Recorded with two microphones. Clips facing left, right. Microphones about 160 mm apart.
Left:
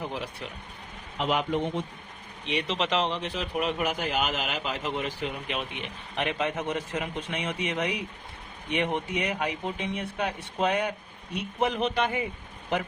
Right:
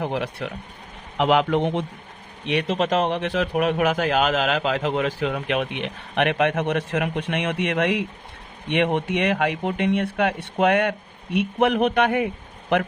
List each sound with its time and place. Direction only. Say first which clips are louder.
0.0 s speech: right 8 dB; 70° right (ahead or behind)
1.1 s a man's voice: right 8 dB; 85° right
2.5 s speech: right 6 dB; 55° right (ahead or behind); by 5.6 s 90° right
5.8 s speech: right 8 dB; 70° right (ahead or behind); by 8.0 s 90° right
8.7 s speech: right 7 dB; 70° right (ahead or behind)
11.3 s a man's voice: right 8 dB; 65° right (ahead or behind)